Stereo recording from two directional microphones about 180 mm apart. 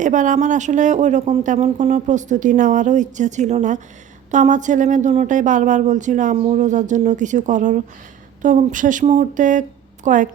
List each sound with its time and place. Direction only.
0.0 s speech: 45° right (ahead or behind)